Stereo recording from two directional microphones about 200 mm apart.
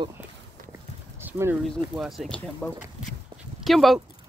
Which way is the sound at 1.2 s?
10° right (ahead or behind).